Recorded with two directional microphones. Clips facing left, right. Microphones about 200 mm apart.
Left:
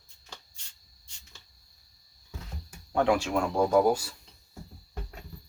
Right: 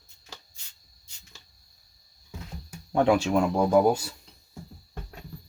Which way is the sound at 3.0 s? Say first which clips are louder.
Right 4 dB; 20° right (ahead or behind).